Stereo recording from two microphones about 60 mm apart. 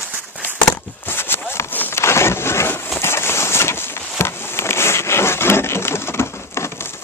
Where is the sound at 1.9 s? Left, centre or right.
Left.